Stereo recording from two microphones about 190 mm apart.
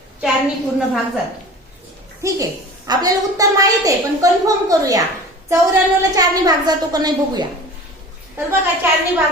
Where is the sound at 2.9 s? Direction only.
20° right (ahead or behind).